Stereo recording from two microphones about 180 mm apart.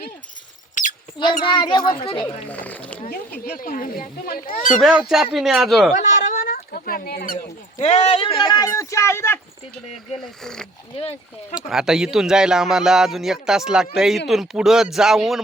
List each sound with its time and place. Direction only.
1.2 s speech: 25° left (ahead or behind)
2.5 s speech: 10° left (ahead or behind)
3.1 s speech: 60° left (ahead or behind)
4.8 s a man's voice: centre (ahead or behind)
5.9 s speech: 50° left (ahead or behind)
7.8 s speech: 35° left (ahead or behind); by 9.4 s 15° left (ahead or behind)
10.2 s a man's voice: 5° left (ahead or behind)